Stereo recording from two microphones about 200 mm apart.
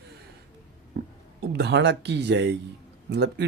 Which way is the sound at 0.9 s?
65° right (ahead or behind).